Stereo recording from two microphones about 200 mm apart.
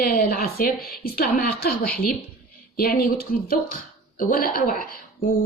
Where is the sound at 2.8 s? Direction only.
50° left (ahead or behind).